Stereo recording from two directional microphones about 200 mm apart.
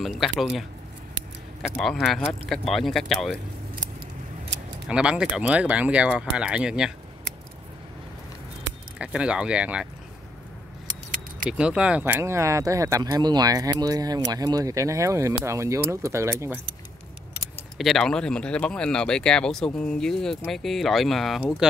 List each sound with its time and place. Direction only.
0.2 s speech: centre (ahead or behind)
1.8 s speech: centre (ahead or behind)
4.8 s speech: 5° right (ahead or behind)
8.9 s speech: 5° right (ahead or behind)
11.1 s keys jangling: 40° right (ahead or behind)
11.5 s speech: 5° right (ahead or behind)
17.7 s speech: centre (ahead or behind)